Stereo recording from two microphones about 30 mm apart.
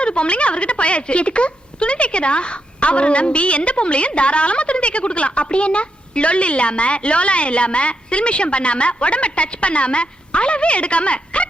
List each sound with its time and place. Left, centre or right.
0.0 s a woman's voice: left